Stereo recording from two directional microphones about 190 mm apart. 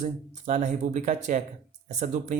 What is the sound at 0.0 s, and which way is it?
Speech, 40° right (ahead or behind).